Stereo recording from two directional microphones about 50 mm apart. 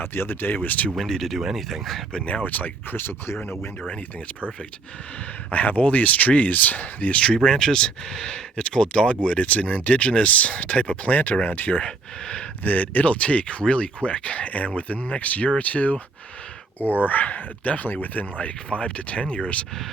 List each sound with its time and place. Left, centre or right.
0.0 s speech: left
0.9 s speech: centre
2.2 s speech: left
5.5 s speech: left
7.3 s speech: centre; by 11.8 s left
11.8 s speech: centre
12.6 s speech: left
16.8 s speech: right
17.1 s speech: left